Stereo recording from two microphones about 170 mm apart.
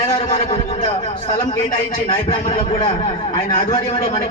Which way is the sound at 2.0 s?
30° left (ahead or behind).